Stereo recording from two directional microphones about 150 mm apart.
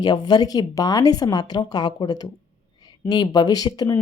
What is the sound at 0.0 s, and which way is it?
Speech, 30° left (ahead or behind).